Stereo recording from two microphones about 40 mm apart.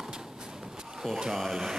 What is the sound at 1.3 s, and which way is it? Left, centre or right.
Speech, centre.